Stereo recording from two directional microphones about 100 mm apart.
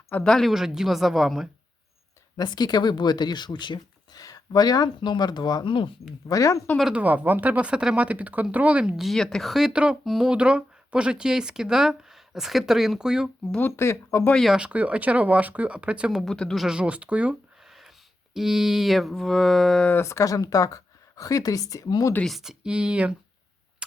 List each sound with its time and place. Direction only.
0.2 s speech: 5° left (ahead or behind)
2.3 s speech: 45° left (ahead or behind)
6.2 s speech: 35° left (ahead or behind)
6.9 s speech: 15° right (ahead or behind)
13.6 s speech: 25° left (ahead or behind)
14.3 s speech: centre (ahead or behind)
14.6 s speech: 15° right (ahead or behind)
16.2 s speech: 5° left (ahead or behind)
19.9 s speech: 25° left (ahead or behind)
22.2 s speech: centre (ahead or behind)